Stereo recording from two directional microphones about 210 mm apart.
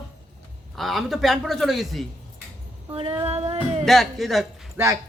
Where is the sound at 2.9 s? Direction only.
25° right (ahead or behind).